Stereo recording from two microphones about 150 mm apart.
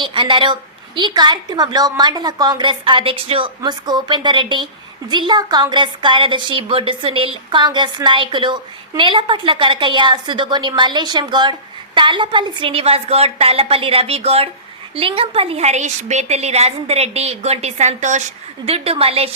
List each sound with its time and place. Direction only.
0.0 s a woman's voice: 35° right (ahead or behind); by 18.2 s 50° right (ahead or behind)
18.6 s a woman's voice: 40° right (ahead or behind)